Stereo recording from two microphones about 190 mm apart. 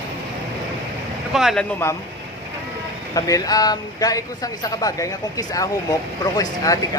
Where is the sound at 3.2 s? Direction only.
20° left (ahead or behind).